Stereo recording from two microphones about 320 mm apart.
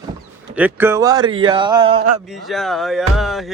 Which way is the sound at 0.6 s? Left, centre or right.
Centre.